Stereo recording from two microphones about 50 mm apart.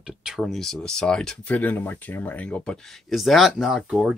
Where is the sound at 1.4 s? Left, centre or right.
Left; by 3.0 s centre.